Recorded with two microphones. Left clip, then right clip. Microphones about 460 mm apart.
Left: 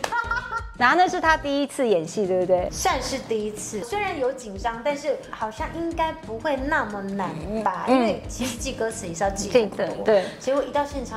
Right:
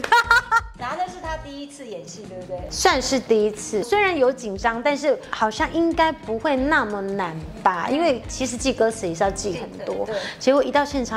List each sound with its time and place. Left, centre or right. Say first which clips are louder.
0.1 s music: right 10 dB; right
0.7 s a woman's voice: left 9 dB; left
2.8 s a woman's voice: right 5 dB; right
9.6 s a woman's voice: left 5 dB; left
10.4 s a woman's voice: right 5 dB; right